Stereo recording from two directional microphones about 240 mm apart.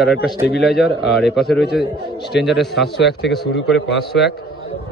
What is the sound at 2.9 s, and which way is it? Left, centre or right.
Speech, left.